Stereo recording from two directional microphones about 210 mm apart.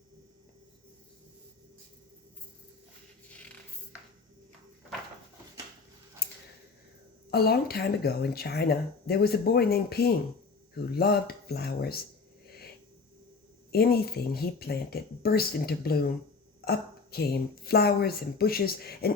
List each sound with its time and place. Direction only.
6.2 s scissors: 45° left (ahead or behind)
7.3 s speech: 50° left (ahead or behind)
13.7 s speech: 45° left (ahead or behind)